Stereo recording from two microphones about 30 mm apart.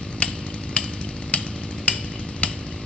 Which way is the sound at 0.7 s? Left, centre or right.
Left.